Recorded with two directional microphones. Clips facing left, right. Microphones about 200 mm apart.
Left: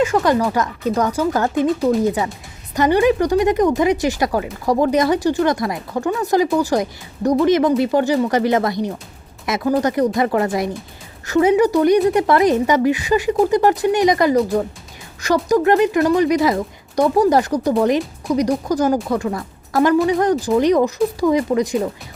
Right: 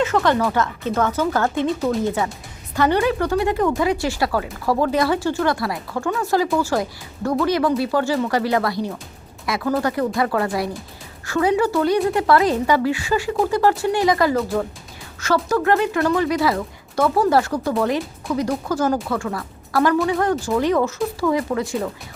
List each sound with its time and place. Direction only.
0.0 s speech: 15° left (ahead or behind)
1.6 s speech: centre (ahead or behind)
2.0 s a woman's voice: 15° left (ahead or behind)